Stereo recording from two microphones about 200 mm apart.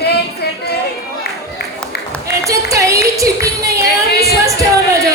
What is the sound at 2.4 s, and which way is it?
Speech, 15° right (ahead or behind).